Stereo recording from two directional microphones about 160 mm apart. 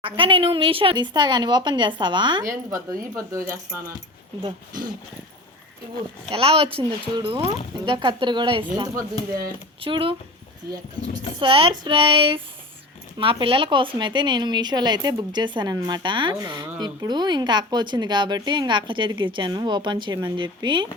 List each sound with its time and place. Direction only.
0.0 s speech: 35° right (ahead or behind)
6.3 s speech: 35° right (ahead or behind)
11.3 s speech: 35° right (ahead or behind)